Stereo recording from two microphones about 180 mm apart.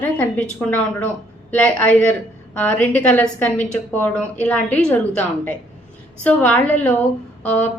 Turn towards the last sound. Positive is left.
turn(degrees=10)  # may be behind; listen again after turning